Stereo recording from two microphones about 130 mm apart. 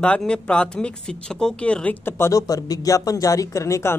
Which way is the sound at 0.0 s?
10° left (ahead or behind).